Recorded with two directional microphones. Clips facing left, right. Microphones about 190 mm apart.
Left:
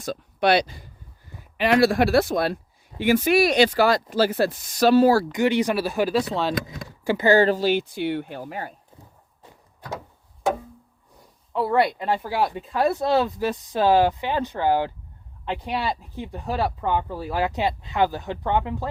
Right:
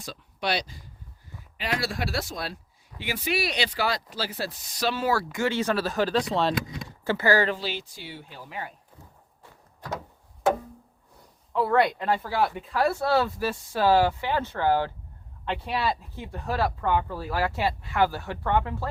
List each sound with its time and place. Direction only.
0.0 s speech: 50° left (ahead or behind); by 5.2 s 35° left (ahead or behind)
5.3 s speech: 15° left (ahead or behind); by 6.5 s centre (ahead or behind)
7.0 s speech: 15° left (ahead or behind)
7.3 s speech: 35° left (ahead or behind)
9.4 s door: 15° left (ahead or behind)
11.5 s speech: 10° left (ahead or behind)